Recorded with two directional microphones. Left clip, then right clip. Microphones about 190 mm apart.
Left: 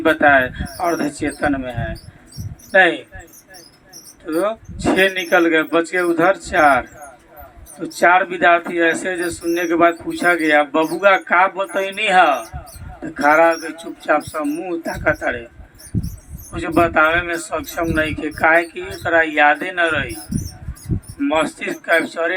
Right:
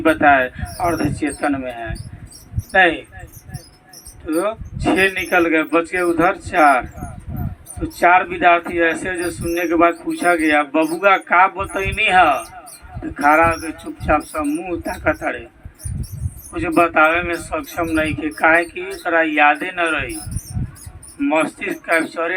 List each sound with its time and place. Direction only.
0.0 s speech: 40° left (ahead or behind)
4.3 s speech: 40° left (ahead or behind)
16.5 s speech: 40° left (ahead or behind)
21.2 s speech: 40° left (ahead or behind)